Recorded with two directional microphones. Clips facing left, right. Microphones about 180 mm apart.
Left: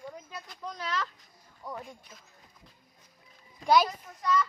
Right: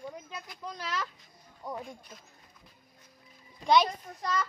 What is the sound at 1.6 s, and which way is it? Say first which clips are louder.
Speech: right 2 dB; 20° right (ahead or behind).